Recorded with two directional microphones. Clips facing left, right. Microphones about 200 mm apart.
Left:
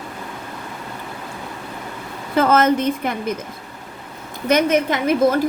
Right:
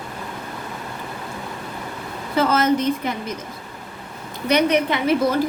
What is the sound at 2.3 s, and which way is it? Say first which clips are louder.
Speech: left 3 dB; 55° left (ahead or behind).